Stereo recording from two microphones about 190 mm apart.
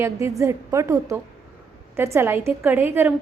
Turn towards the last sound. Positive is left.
turn(degrees=-10)  # may be behind; listen again after turning